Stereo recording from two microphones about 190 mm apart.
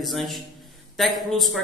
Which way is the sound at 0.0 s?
Centre (ahead or behind).